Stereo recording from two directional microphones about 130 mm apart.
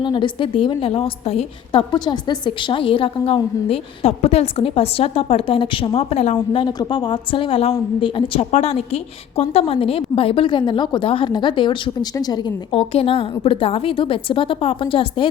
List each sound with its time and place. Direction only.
0.0 s a woman's voice: 40° left (ahead or behind)
1.7 s a woman's voice: 35° left (ahead or behind); by 6.3 s 55° left (ahead or behind)
6.3 s a woman's voice: 40° left (ahead or behind)